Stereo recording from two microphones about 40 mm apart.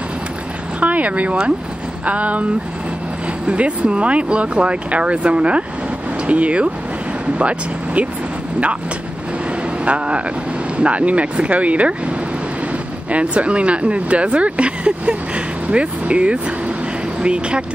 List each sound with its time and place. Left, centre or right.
0.7 s speech: right
3.4 s speech: right
9.8 s speech: right
13.1 s speech: right